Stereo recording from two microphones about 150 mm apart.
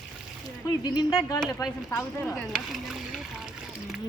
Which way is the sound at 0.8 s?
25° left (ahead or behind).